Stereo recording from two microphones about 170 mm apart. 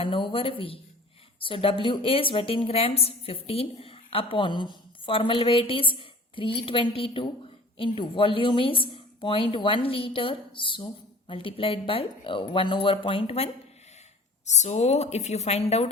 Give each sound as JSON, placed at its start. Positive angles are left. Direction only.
{"t": 0.0, "sound": "a woman's voice", "side_deg": 30}